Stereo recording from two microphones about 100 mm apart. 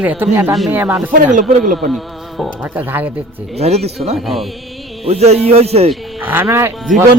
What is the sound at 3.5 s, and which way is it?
Speech, 90° right.